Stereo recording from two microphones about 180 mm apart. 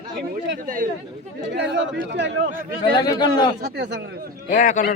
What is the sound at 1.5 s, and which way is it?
Speech, 80° right.